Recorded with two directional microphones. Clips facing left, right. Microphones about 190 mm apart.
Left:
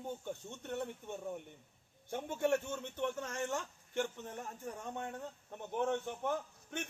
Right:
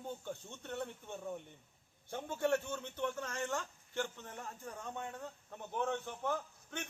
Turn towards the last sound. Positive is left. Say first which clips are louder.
# left 1 dB
turn(degrees=15)  # may be behind; listen again after turning